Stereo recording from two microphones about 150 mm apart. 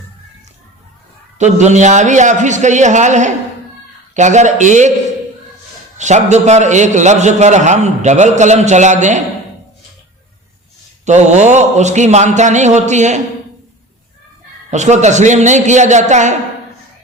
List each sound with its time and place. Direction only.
1.4 s a man's voice: 50° right (ahead or behind)
6.0 s a man's voice: 50° right (ahead or behind)
11.0 s a man's voice: 50° right (ahead or behind)
14.7 s a man's voice: 50° right (ahead or behind)